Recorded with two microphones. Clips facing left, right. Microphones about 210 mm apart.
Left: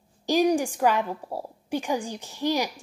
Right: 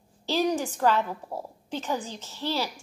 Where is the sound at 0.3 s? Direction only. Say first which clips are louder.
Left 4 dB; 15° left (ahead or behind).